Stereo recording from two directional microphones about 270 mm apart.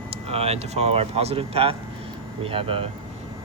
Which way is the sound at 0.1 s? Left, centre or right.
Right.